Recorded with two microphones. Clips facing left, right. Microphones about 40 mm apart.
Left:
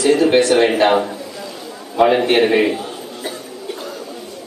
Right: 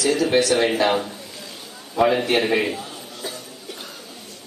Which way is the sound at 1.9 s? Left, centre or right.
Left.